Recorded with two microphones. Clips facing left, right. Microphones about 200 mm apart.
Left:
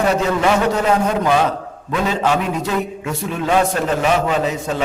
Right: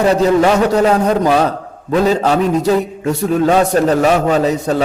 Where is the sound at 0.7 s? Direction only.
35° right (ahead or behind).